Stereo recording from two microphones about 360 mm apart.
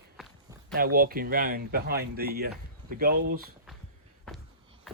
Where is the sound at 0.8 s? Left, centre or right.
Right.